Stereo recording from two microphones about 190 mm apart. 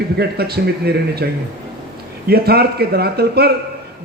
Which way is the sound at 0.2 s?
55° right (ahead or behind).